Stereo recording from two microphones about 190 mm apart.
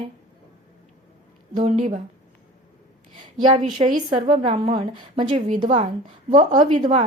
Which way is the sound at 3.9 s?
45° right (ahead or behind).